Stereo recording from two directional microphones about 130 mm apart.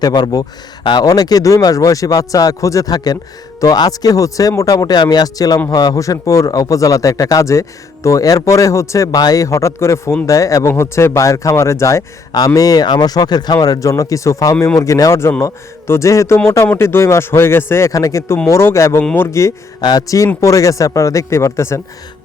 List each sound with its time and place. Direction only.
0.0 s a man's voice: 30° left (ahead or behind)